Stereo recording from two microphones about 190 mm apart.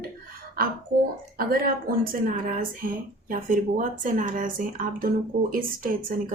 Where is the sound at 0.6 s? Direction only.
50° right (ahead or behind).